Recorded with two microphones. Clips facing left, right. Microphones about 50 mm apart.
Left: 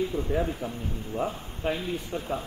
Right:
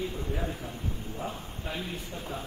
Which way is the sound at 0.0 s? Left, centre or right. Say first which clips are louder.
Left 6 dB; left.